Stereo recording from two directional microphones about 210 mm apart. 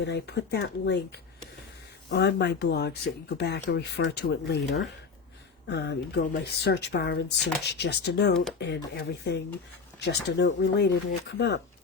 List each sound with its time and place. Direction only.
0.0 s speech: 55° left (ahead or behind)
2.0 s speech: 55° left (ahead or behind)